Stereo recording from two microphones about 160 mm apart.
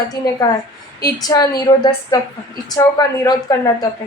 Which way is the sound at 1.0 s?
25° left (ahead or behind).